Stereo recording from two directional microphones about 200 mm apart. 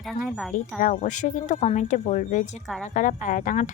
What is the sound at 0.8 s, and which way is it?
Speech, 40° left (ahead or behind).